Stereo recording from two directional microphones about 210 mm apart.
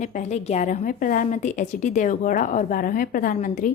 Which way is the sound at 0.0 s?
35° left (ahead or behind).